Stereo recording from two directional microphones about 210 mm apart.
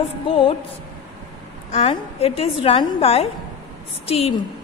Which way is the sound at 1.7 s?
30° left (ahead or behind).